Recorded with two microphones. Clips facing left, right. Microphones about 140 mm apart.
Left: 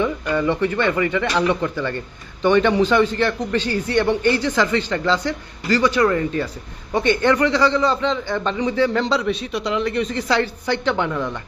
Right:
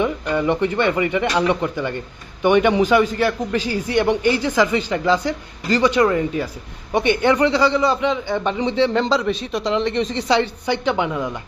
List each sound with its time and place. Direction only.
0.3 s speech: 20° right (ahead or behind)
8.5 s a man's voice: 25° right (ahead or behind)
8.9 s a man's voice: centre (ahead or behind)
9.7 s a man's voice: 30° right (ahead or behind)
10.7 s speech: 10° right (ahead or behind)